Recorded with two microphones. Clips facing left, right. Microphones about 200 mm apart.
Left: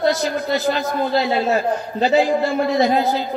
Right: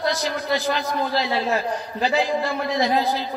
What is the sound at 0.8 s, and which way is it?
A man's voice, 45° left (ahead or behind).